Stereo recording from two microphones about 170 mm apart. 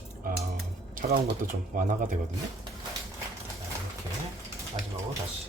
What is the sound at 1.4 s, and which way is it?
Speech, 50° right (ahead or behind).